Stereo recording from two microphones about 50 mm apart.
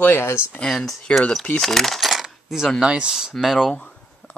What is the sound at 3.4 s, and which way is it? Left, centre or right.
Speech, centre.